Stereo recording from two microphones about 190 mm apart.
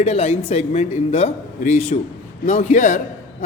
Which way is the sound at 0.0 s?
35° left (ahead or behind).